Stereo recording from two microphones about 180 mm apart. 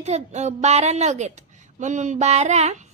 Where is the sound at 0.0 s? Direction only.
40° right (ahead or behind).